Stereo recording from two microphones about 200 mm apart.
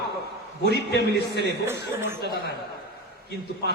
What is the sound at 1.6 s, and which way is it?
Speech, 10° right (ahead or behind).